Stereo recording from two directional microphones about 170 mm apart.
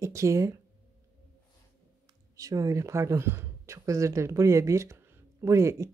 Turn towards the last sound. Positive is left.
turn(degrees=-15)  # may be behind; listen again after turning